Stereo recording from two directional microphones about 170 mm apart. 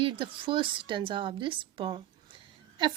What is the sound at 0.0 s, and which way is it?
Speech, 30° right (ahead or behind).